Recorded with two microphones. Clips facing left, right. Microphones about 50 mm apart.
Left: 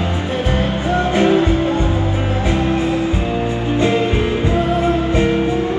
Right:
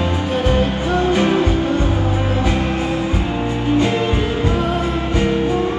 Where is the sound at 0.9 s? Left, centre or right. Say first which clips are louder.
Left 2 dB; left.